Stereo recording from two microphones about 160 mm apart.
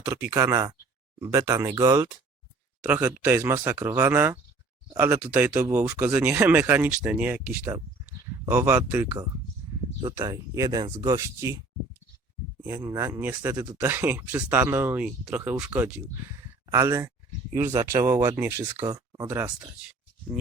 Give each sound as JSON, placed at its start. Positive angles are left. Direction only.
{"t": 0.0, "sound": "speech", "side_deg": -20}
{"t": 3.2, "sound": "speech", "side_deg": -15}
{"t": 12.6, "sound": "speech", "side_deg": -20}
{"t": 16.6, "sound": "speech", "side_deg": -20}